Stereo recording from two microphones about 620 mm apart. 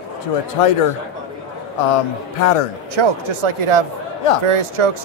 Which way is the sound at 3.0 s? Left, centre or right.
Right.